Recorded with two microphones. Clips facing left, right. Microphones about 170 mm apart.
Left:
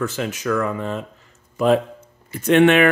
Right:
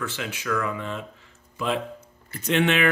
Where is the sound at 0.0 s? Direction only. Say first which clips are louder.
Left 8 dB; 45° left (ahead or behind).